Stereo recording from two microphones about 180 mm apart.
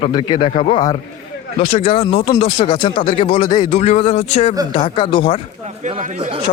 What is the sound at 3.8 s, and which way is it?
A man's voice, 35° left (ahead or behind).